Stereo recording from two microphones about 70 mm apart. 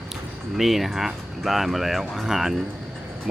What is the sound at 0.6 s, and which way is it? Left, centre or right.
Speech, centre.